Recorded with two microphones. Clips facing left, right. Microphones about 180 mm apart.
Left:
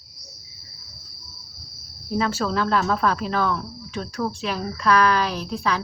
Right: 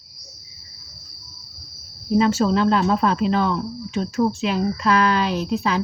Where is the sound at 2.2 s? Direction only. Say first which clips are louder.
Right 6 dB; 25° right (ahead or behind).